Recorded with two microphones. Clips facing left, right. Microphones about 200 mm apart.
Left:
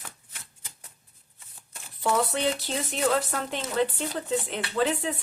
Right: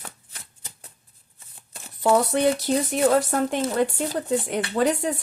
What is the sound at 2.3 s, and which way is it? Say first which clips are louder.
Speech: right 7 dB; 45° right (ahead or behind).